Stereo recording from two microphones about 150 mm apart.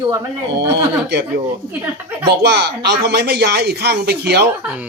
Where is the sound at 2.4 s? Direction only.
90° right.